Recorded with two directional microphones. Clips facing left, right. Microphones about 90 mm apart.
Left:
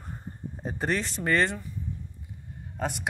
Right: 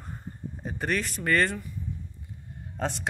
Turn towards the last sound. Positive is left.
turn(degrees=10)  # may be behind; listen again after turning